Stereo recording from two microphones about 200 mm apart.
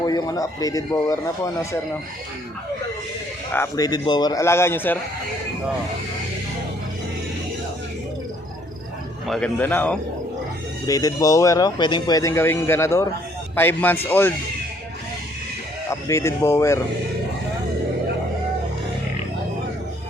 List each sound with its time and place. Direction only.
0.0 s speech: 20° left (ahead or behind)
3.5 s speech: 15° left (ahead or behind)
9.2 s speech: 5° left (ahead or behind)
15.9 s speech: 15° left (ahead or behind)